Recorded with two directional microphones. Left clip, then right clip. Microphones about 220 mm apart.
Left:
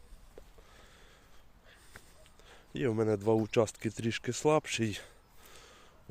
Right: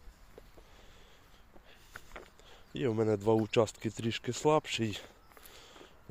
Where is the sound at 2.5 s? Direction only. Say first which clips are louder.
Left 1 dB; 5° left (ahead or behind).